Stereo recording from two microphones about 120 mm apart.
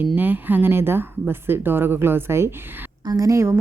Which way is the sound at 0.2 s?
15° right (ahead or behind).